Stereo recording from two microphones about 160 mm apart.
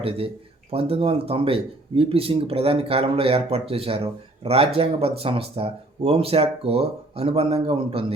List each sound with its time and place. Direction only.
0.7 s speech: 35° right (ahead or behind)